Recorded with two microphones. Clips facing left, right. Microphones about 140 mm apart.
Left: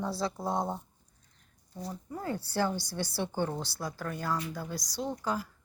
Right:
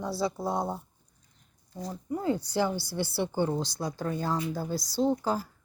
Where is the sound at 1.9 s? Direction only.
15° right (ahead or behind); by 5.5 s 30° right (ahead or behind).